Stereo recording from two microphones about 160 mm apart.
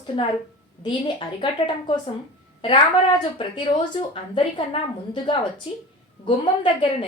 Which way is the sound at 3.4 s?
30° left (ahead or behind).